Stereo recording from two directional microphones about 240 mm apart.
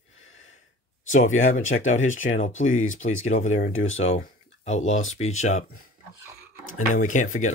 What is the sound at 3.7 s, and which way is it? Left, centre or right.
Speech, left.